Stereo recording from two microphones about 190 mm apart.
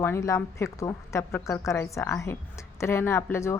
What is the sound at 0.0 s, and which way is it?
A woman's voice, 15° left (ahead or behind).